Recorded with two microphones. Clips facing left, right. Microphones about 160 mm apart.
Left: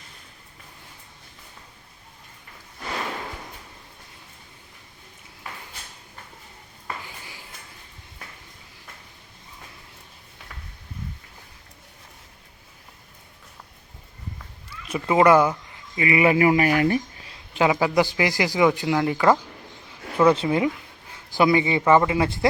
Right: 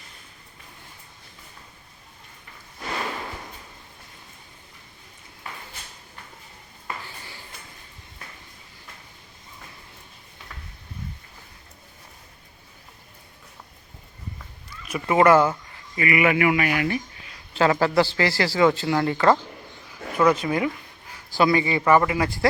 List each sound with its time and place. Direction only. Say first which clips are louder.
14.8 s a man's voice: even; 20° left (ahead or behind)
16.0 s speech: left 2 dB; 25° left (ahead or behind)
17.5 s a man's voice: even; 15° left (ahead or behind)
20.1 s a man's voice: left 2 dB; 30° left (ahead or behind)